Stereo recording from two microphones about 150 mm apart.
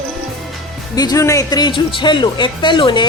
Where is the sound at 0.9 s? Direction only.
25° left (ahead or behind).